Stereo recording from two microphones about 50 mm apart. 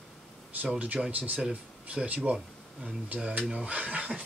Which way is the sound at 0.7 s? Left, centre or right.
Right.